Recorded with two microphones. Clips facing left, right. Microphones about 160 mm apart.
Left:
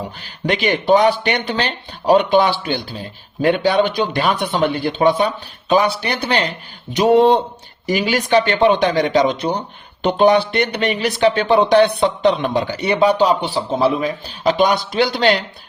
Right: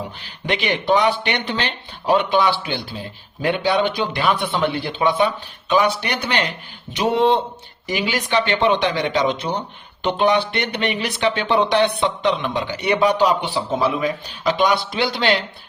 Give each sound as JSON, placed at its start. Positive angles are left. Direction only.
{"t": 0.4, "sound": "speech", "side_deg": 40}
{"t": 6.9, "sound": "speech", "side_deg": 45}